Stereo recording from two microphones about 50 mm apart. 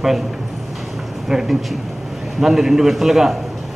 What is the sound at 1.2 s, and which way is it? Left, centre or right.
Speech, centre.